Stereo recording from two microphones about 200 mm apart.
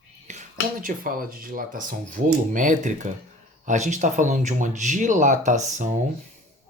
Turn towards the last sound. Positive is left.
turn(degrees=-35)  # may be behind; listen again after turning